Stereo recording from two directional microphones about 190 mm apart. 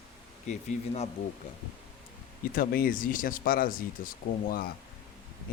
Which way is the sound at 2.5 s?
50° left (ahead or behind).